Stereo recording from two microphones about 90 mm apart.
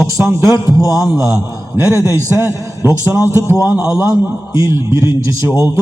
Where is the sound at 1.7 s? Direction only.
30° right (ahead or behind).